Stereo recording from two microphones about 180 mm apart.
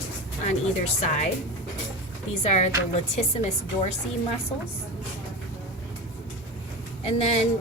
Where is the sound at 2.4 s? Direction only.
40° left (ahead or behind).